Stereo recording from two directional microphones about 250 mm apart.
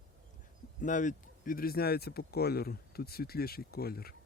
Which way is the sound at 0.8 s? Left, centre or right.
Left.